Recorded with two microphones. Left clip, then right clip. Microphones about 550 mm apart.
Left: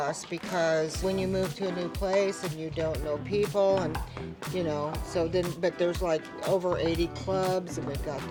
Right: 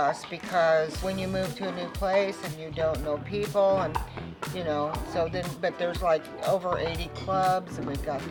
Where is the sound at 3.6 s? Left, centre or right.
Left.